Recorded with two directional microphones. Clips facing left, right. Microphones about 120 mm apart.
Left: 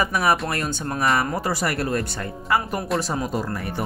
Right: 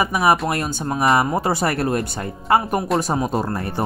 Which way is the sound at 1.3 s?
25° right (ahead or behind).